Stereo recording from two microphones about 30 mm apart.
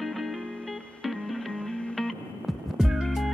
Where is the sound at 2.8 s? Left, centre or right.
Centre.